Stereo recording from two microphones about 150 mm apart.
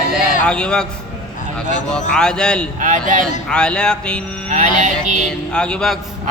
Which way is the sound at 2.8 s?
60° right (ahead or behind).